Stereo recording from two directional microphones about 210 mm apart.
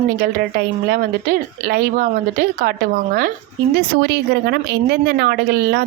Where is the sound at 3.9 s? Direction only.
50° right (ahead or behind).